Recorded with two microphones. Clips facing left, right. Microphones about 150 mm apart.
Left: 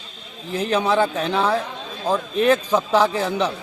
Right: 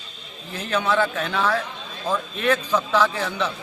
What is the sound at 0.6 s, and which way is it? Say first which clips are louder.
A man's voice: left 3 dB; 35° left (ahead or behind).